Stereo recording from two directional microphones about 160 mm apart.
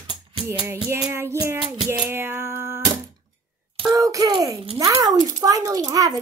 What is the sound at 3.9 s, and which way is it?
A child's voice, 20° right (ahead or behind).